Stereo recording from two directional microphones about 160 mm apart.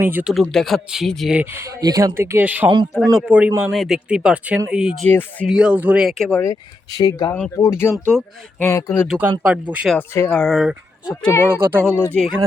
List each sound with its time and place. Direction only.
0.0 s speech: 10° right (ahead or behind)
0.3 s speech: centre (ahead or behind)
1.4 s speech: 15° right (ahead or behind)
2.9 s speech: centre (ahead or behind)
5.0 s speech: 10° left (ahead or behind)
5.5 s speech: 5° right (ahead or behind)
6.4 s speech: 20° left (ahead or behind)
9.0 s speech: 10° right (ahead or behind)
9.9 s speech: 10° left (ahead or behind); by 11.8 s 10° right (ahead or behind)
11.8 s speech: 10° left (ahead or behind)